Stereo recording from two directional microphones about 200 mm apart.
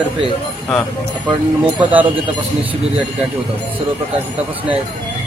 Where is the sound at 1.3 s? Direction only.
25° right (ahead or behind).